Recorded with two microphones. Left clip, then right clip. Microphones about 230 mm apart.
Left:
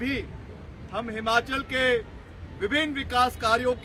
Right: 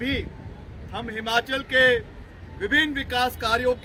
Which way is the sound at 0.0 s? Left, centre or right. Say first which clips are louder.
Right 2 dB; centre.